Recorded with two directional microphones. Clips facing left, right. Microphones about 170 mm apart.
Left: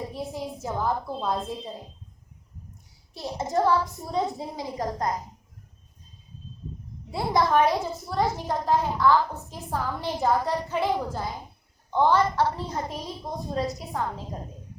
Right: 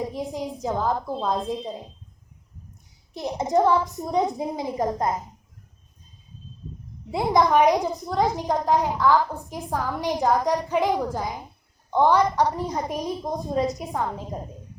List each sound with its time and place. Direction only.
0.0 s a woman's voice: 15° right (ahead or behind)
3.2 s a woman's voice: 20° right (ahead or behind)
7.1 s a woman's voice: 20° right (ahead or behind)